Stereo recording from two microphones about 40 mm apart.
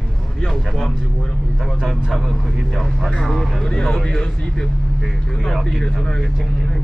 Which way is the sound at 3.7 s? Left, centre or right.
Centre.